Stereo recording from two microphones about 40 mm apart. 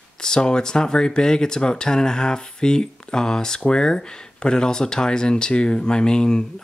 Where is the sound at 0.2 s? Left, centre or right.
Centre.